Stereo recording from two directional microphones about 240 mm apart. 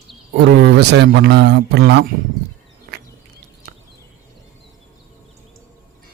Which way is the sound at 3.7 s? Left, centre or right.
Right.